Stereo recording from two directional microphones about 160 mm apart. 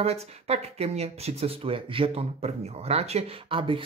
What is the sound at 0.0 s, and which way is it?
Speech, 40° right (ahead or behind).